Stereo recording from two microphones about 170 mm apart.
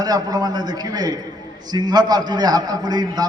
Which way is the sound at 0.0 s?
20° right (ahead or behind).